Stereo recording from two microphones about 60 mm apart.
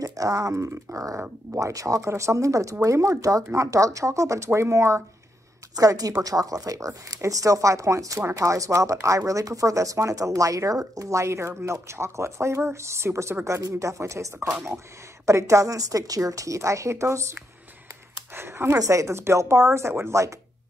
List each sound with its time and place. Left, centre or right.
0.0 s speech: right
2.0 s speech: right
5.8 s speech: right
8.2 s speech: right
13.6 s speech: right
18.3 s speech: right
18.8 s speech: right